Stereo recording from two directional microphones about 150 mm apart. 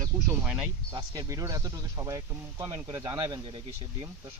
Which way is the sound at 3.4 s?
35° right (ahead or behind).